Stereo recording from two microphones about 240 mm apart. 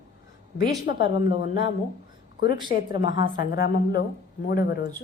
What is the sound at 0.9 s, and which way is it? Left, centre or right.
Speech, left.